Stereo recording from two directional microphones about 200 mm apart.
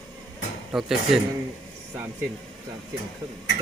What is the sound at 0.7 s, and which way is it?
Speech, centre (ahead or behind).